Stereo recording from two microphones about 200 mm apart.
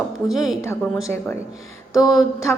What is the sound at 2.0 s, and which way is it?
Speech, 20° left (ahead or behind).